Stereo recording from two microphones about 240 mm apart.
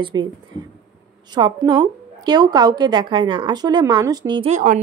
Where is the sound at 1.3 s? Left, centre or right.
Centre.